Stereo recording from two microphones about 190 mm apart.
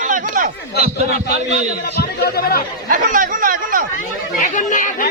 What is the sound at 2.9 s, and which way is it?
Speech, 45° right (ahead or behind).